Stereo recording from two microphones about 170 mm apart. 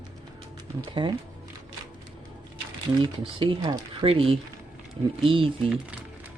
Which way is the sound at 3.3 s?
30° right (ahead or behind).